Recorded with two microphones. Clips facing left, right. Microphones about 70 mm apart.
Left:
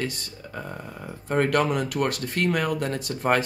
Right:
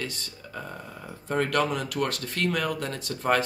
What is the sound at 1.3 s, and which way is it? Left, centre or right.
Speech, left.